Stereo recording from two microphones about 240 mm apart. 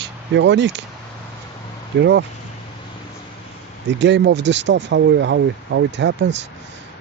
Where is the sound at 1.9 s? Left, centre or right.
Right.